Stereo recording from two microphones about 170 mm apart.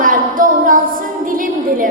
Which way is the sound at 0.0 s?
55° right (ahead or behind).